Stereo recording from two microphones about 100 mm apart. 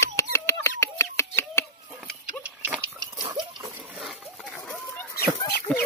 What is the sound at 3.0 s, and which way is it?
Pig, 50° right (ahead or behind).